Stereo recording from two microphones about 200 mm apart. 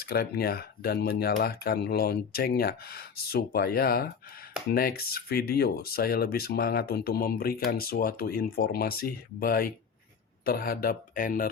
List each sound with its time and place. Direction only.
0.0 s speech: 50° left (ahead or behind)